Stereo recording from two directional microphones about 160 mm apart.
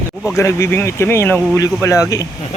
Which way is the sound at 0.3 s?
15° left (ahead or behind).